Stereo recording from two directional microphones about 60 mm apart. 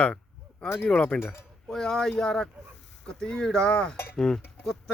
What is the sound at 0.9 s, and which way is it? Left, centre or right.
Speech, left.